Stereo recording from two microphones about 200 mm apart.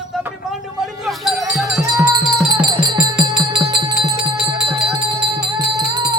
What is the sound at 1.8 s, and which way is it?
Music, 15° right (ahead or behind).